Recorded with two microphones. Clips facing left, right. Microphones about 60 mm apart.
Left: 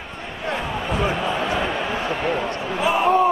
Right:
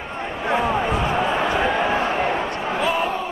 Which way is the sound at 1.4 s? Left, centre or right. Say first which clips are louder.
Right 3 dB; right.